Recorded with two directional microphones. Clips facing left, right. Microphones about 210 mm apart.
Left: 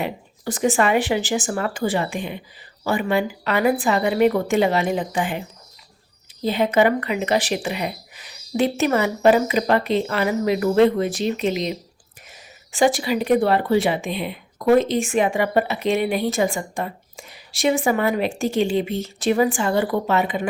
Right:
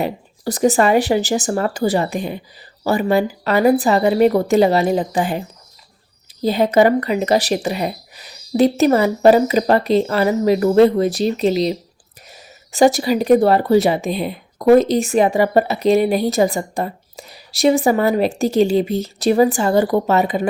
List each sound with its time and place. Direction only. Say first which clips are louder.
0.0 s speech: right 5 dB; 40° right (ahead or behind)
6.4 s speech: right 4 dB; 40° right (ahead or behind)